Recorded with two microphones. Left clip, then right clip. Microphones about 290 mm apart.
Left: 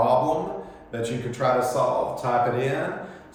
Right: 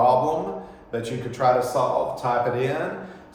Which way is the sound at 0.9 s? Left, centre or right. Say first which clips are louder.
Even; centre.